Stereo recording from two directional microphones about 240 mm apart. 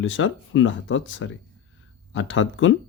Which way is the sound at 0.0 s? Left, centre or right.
Left.